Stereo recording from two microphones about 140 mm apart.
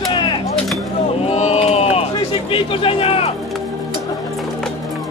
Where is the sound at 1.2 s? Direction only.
50° left (ahead or behind).